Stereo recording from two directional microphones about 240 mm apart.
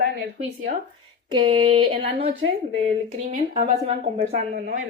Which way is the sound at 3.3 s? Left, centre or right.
Right.